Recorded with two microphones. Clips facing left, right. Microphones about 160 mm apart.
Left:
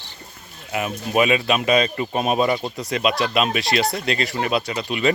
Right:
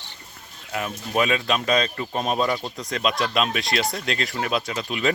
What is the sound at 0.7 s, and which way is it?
Speech, 5° left (ahead or behind).